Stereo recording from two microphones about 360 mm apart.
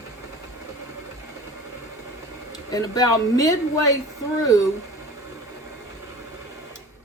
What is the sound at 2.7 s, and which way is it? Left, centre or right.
Speech, centre.